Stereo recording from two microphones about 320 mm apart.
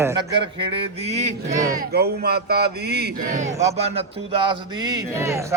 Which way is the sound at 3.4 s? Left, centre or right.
Centre.